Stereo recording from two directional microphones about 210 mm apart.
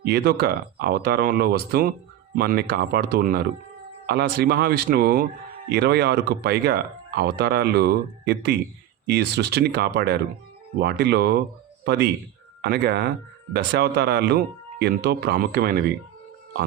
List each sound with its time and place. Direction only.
0.0 s speech: 50° right (ahead or behind)
12.6 s speech: 50° right (ahead or behind)